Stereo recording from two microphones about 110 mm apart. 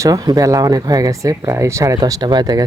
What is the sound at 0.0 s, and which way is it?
A woman's voice, 35° right (ahead or behind).